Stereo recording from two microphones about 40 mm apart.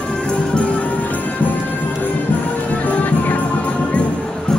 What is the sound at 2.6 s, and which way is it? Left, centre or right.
Music, left.